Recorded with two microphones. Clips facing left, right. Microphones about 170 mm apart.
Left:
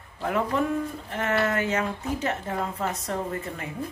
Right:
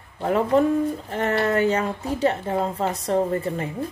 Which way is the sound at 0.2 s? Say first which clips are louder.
Right 6 dB; 30° right (ahead or behind).